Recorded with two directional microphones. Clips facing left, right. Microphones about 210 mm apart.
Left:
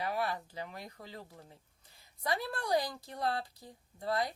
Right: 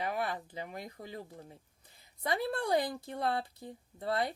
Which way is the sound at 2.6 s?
25° right (ahead or behind).